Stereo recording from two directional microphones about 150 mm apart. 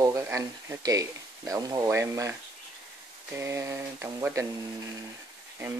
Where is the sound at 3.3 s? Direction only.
20° right (ahead or behind).